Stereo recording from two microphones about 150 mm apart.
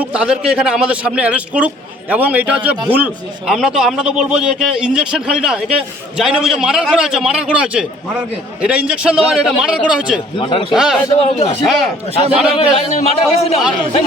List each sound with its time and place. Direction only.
0.1 s a man's voice: 5° right (ahead or behind)
10.3 s a man's voice: 35° left (ahead or behind)
10.7 s a man's voice: centre (ahead or behind)
11.2 s a man's voice: 45° left (ahead or behind)
11.6 s a man's voice: centre (ahead or behind)
12.7 s a man's voice: 45° left (ahead or behind)